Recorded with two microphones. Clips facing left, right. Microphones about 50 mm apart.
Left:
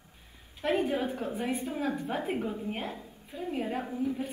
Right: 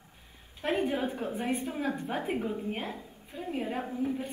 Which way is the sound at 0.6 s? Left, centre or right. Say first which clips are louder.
Left 2 dB; right.